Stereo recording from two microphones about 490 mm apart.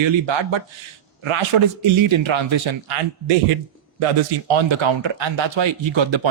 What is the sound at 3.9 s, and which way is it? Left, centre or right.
Speech, right.